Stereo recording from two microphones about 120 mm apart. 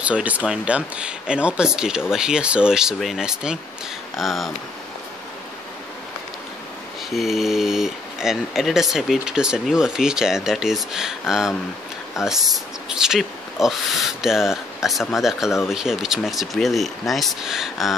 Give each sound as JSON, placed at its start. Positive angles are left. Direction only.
{"t": 0.0, "sound": "speech", "side_deg": -10}
{"t": 7.1, "sound": "speech", "side_deg": 0}